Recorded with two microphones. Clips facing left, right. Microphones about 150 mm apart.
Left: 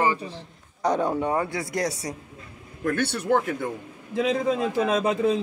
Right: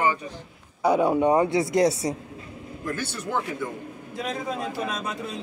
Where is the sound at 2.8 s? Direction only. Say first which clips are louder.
Left 7 dB; 65° left (ahead or behind).